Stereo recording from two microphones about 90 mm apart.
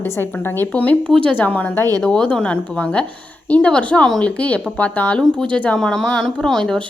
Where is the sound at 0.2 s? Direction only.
25° left (ahead or behind).